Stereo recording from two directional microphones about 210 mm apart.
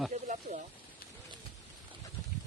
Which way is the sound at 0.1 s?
35° right (ahead or behind).